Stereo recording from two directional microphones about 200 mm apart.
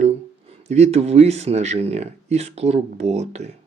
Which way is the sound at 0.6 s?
35° right (ahead or behind).